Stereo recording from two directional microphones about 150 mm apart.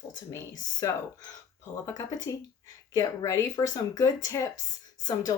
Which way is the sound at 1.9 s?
20° left (ahead or behind).